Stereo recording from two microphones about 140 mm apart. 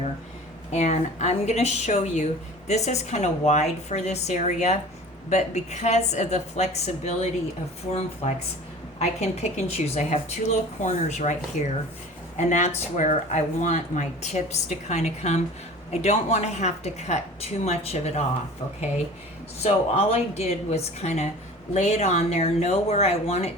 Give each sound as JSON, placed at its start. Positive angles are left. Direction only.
{"t": 0.7, "sound": "speech", "side_deg": 55}
{"t": 19.6, "sound": "speech", "side_deg": 45}